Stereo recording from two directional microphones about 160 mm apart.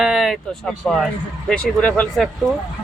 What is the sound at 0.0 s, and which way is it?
Speech, centre (ahead or behind).